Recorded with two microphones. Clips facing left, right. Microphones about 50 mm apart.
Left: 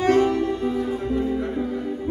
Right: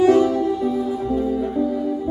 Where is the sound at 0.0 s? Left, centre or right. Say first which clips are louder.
Right 4 dB; left.